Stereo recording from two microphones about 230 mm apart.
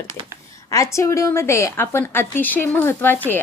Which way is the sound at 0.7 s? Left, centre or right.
Centre.